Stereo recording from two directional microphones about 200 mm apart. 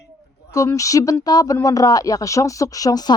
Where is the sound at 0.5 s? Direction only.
15° left (ahead or behind).